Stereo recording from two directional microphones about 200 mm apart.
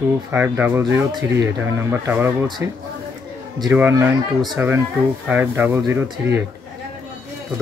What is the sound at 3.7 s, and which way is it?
Speech, 10° right (ahead or behind).